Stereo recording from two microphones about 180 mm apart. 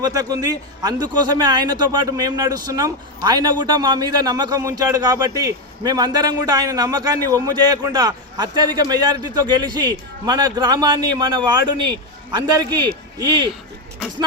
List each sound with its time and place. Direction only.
0.0 s a man's voice: 20° right (ahead or behind)